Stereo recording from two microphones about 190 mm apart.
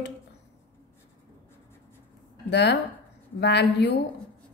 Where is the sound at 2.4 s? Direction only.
60° left (ahead or behind).